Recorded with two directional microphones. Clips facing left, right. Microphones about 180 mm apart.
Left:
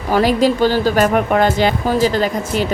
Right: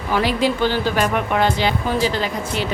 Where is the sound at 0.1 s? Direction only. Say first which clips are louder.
Left 5 dB; 40° left (ahead or behind).